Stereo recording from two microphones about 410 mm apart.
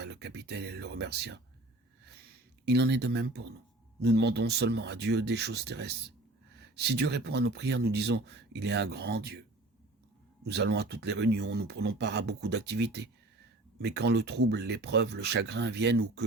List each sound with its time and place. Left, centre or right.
0.0 s speech: right
2.6 s speech: right
10.4 s speech: right